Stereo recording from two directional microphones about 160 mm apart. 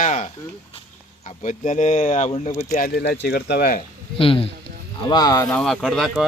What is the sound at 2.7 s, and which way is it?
Speech, 70° left (ahead or behind).